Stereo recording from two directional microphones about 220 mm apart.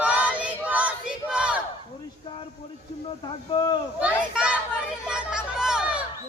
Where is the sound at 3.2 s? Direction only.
20° left (ahead or behind).